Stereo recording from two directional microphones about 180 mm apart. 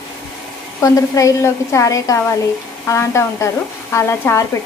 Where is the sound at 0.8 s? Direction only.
20° left (ahead or behind).